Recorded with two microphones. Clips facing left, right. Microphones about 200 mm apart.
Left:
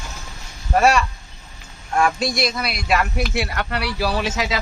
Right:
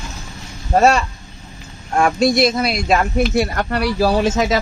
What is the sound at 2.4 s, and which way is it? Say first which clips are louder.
Speech: right 7 dB; 25° right (ahead or behind).